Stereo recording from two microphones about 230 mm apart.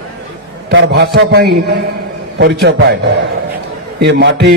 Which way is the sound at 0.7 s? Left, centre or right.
Right.